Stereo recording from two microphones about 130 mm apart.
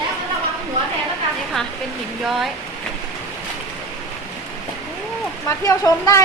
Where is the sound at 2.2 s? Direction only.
Centre (ahead or behind).